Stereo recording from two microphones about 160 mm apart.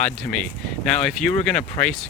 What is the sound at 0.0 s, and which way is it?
Speech, 5° left (ahead or behind).